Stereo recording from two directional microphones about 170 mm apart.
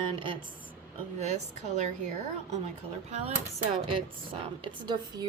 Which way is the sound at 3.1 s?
35° right (ahead or behind).